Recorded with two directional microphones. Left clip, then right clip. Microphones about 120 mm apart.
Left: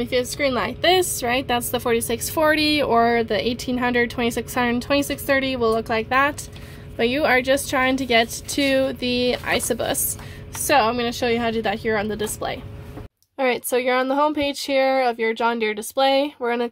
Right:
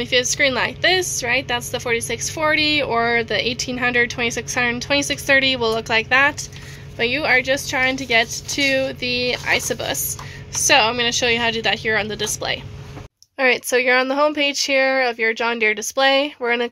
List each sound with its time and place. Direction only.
0.0 s a woman's voice: 20° left (ahead or behind)
0.9 s a woman's voice: 40° left (ahead or behind); by 6.3 s 25° left (ahead or behind)
7.0 s a woman's voice: 40° left (ahead or behind)
10.5 s a woman's voice: 25° left (ahead or behind)
13.4 s speech: 10° left (ahead or behind)